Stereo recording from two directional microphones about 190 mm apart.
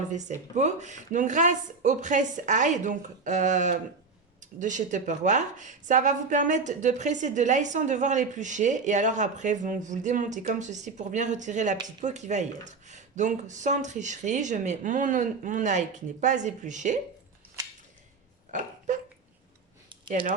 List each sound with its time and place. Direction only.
0.1 s speech: 40° right (ahead or behind)
18.5 s speech: 40° right (ahead or behind)